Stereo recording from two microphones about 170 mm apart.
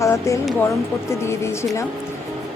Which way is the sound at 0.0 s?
15° left (ahead or behind).